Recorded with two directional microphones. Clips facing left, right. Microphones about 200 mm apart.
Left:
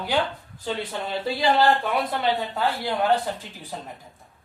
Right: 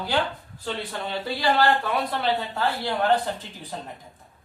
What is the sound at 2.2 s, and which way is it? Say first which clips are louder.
Speech: left 1 dB; 15° left (ahead or behind).